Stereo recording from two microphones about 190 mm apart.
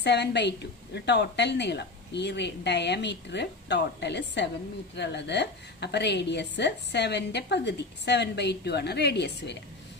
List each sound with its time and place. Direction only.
0.0 s a woman's voice: 60° left (ahead or behind)